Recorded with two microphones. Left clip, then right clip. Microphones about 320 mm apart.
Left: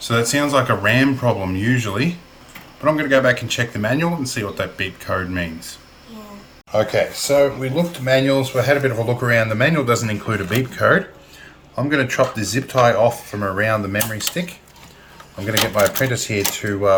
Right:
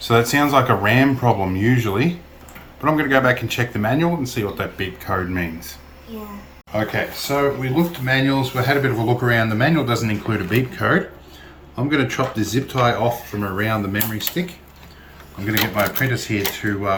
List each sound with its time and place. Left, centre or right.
0.0 s speech: centre
6.7 s speech: centre
15.4 s speech: centre